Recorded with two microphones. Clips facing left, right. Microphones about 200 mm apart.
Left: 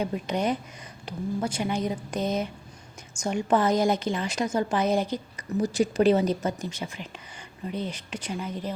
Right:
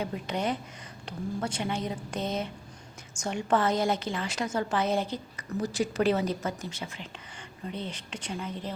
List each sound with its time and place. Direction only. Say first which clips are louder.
0.0 s a woman's voice: left 4 dB; 15° left (ahead or behind)